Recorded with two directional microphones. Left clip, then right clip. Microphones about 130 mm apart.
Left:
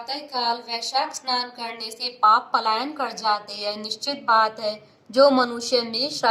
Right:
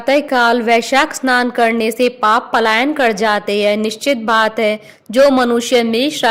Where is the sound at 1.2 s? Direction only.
20° right (ahead or behind).